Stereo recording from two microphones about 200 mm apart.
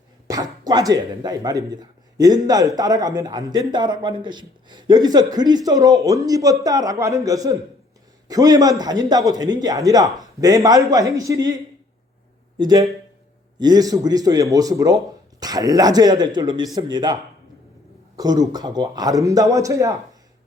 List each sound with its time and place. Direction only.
0.3 s a man's voice: 20° right (ahead or behind)
18.2 s speech: 20° right (ahead or behind)